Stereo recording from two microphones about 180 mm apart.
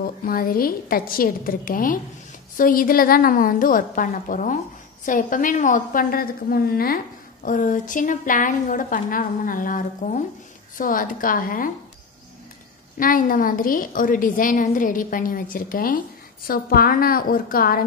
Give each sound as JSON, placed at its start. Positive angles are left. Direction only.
{"t": 0.0, "sound": "a woman's voice", "side_deg": 55}
{"t": 12.9, "sound": "a woman's voice", "side_deg": 50}